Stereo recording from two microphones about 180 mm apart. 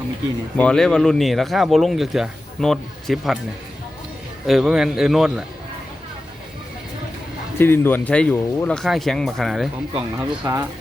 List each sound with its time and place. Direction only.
0.5 s speech: 5° left (ahead or behind)
4.4 s speech: 5° right (ahead or behind)
7.6 s speech: 10° left (ahead or behind); by 10.3 s 5° right (ahead or behind)
10.4 s speech: 20° right (ahead or behind)